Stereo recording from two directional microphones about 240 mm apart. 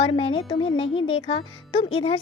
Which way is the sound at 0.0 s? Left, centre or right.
Left.